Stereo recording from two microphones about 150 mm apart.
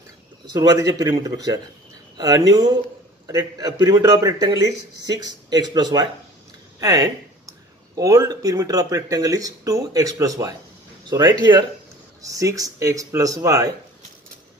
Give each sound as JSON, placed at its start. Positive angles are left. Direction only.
{"t": 0.5, "sound": "speech", "side_deg": -20}